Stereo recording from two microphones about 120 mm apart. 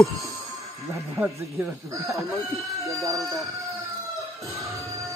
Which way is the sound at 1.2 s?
15° right (ahead or behind).